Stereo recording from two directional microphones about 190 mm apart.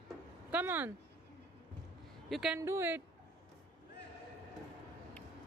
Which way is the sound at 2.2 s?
Centre (ahead or behind).